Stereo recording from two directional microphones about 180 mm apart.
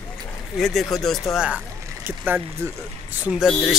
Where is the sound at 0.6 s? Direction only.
Centre (ahead or behind).